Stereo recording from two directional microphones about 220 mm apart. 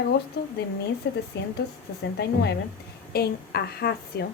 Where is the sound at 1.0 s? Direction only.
50° left (ahead or behind).